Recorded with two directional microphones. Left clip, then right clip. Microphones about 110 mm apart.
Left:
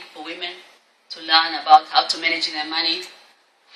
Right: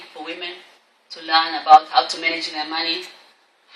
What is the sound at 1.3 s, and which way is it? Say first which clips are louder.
A man's voice: right 1 dB; 20° right (ahead or behind).